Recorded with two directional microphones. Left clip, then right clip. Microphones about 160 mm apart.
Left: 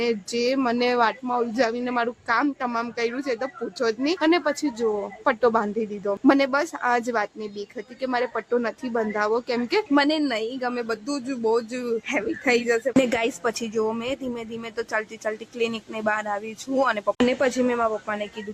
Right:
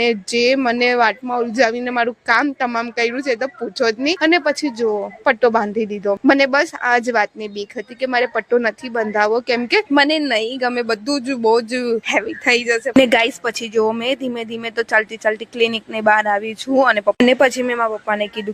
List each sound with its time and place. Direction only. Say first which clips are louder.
0.0 s speech: right 8 dB; 25° right (ahead or behind)
17.2 s speech: right 7 dB; 40° right (ahead or behind)